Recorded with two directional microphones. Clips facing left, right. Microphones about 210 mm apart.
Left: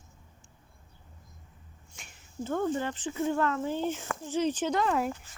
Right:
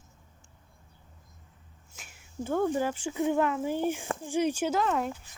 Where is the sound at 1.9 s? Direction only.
5° right (ahead or behind).